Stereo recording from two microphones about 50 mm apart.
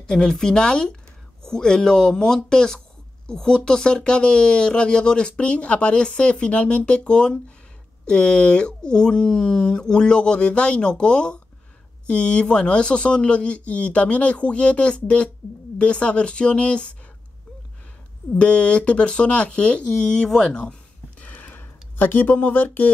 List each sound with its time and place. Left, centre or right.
0.0 s speech: centre
18.3 s speech: left
21.2 s a sound: left